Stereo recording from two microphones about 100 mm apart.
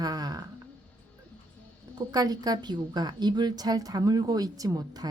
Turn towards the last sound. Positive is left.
turn(degrees=-35)  # may be behind; listen again after turning